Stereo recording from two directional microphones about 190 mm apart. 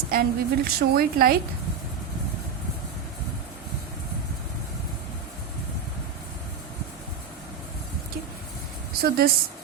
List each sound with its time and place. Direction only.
0.1 s a woman's voice: 50° right (ahead or behind)
9.0 s speech: 55° right (ahead or behind)